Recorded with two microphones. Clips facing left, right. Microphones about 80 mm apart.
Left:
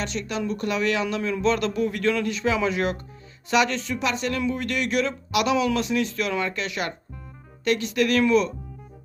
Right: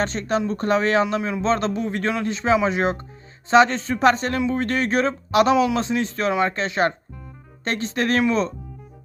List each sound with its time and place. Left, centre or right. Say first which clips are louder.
0.0 s a man's voice: right 6 dB; right
3.9 s speech: right 10 dB; right